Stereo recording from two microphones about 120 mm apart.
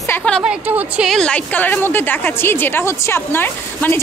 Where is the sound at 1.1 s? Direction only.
10° left (ahead or behind).